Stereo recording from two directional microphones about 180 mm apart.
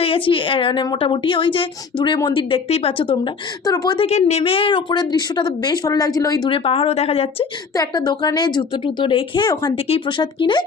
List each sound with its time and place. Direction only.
0.0 s a woman's voice: 30° left (ahead or behind)
4.0 s a woman's voice: 35° left (ahead or behind)